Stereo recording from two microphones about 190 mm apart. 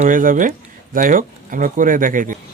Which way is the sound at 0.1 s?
45° right (ahead or behind).